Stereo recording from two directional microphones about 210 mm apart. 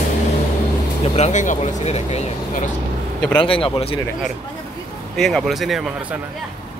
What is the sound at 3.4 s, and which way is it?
Speech, 25° left (ahead or behind).